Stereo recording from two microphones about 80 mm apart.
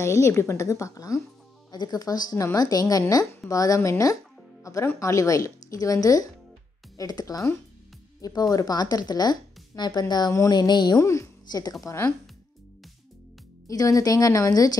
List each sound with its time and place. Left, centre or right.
0.0 s a woman's voice: left
1.7 s speech: left
4.9 s speech: left
11.0 s a woman's voice: left
11.4 s speech: left
11.8 s a woman's voice: left
13.7 s speech: left